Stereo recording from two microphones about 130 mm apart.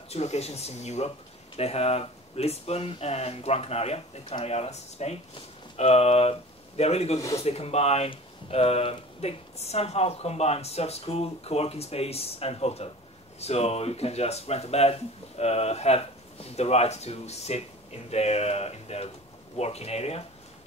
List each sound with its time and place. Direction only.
0.1 s speech: 55° left (ahead or behind)
7.2 s speech: 25° left (ahead or behind)
7.4 s speech: 50° left (ahead or behind)